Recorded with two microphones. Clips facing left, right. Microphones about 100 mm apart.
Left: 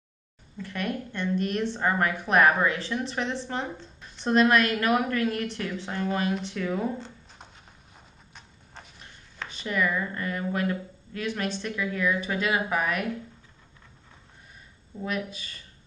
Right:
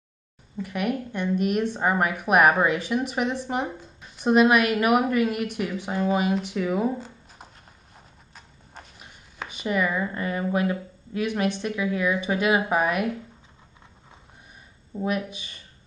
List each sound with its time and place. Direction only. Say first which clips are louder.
0.6 s a woman's voice: right 4 dB; 15° right (ahead or behind)
15.0 s a woman's voice: right 4 dB; 15° right (ahead or behind)